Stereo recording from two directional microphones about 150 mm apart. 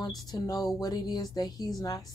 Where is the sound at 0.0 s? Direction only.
25° left (ahead or behind).